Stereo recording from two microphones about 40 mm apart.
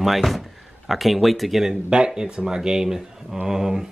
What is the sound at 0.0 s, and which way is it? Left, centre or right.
Speech, centre.